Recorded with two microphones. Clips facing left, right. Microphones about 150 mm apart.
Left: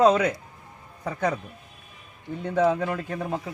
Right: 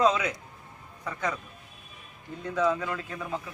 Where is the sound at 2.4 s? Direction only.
60° left (ahead or behind).